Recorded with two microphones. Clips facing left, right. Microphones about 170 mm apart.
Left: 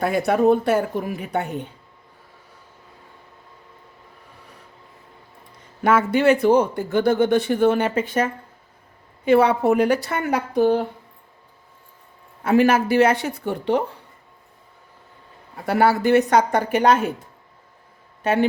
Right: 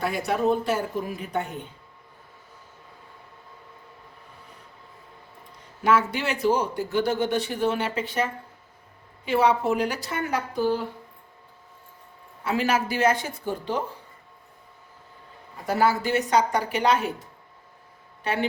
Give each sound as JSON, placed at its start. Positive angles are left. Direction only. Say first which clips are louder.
{"t": 0.0, "sound": "a woman's voice", "louder": "left 6 dB", "side_deg": 55}
{"t": 5.8, "sound": "a woman's voice", "louder": "left 6 dB", "side_deg": 55}
{"t": 12.4, "sound": "a woman's voice", "louder": "left 8 dB", "side_deg": 50}
{"t": 15.6, "sound": "speech", "louder": "left 5 dB", "side_deg": 60}
{"t": 18.2, "sound": "speech", "louder": "left 7 dB", "side_deg": 45}